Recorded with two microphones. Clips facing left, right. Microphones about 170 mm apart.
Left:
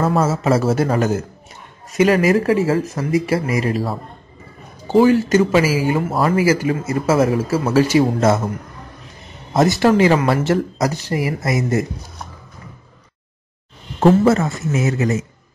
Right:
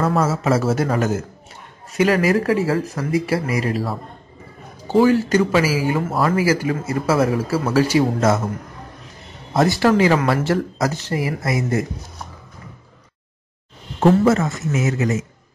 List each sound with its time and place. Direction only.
0.0 s a man's voice: 25° left (ahead or behind)
2.0 s a man's voice: 20° left (ahead or behind)
4.9 s a man's voice: 20° left (ahead or behind)
9.5 s a man's voice: 20° left (ahead or behind)
14.0 s speech: 35° left (ahead or behind)